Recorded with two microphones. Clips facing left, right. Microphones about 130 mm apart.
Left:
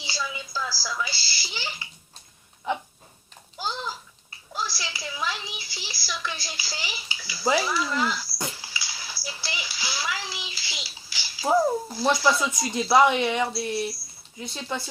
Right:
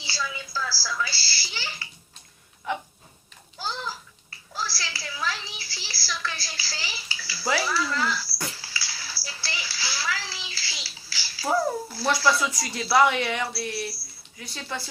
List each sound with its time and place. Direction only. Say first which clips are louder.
0.0 s television: even; 15° left (ahead or behind)
2.7 s a sound: left 2 dB; 20° left (ahead or behind)
8.4 s music: left 1 dB; 15° left (ahead or behind)
14.3 s speech: left 3 dB; 20° left (ahead or behind)